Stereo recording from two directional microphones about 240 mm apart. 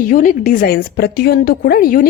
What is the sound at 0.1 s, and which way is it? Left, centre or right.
A woman's voice, left.